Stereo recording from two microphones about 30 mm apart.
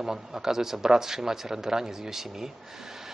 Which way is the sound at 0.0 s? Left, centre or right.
Centre.